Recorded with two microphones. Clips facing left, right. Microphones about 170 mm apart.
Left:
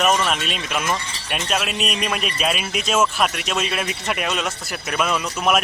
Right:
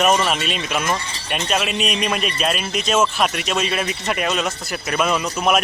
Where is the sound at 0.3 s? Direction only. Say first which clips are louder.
Right 2 dB; centre (ahead or behind).